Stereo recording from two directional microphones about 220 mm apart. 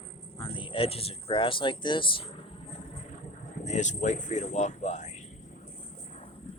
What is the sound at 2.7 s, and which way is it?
Cricket, 30° left (ahead or behind).